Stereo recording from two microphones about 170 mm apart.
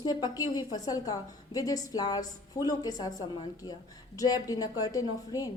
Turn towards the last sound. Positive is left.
turn(degrees=20)  # may be behind; listen again after turning